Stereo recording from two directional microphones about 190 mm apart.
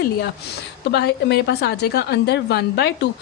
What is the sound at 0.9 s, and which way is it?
A woman's voice, 60° left (ahead or behind).